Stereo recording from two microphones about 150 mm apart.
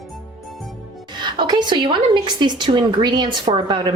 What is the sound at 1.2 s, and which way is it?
A woman's voice, 30° right (ahead or behind).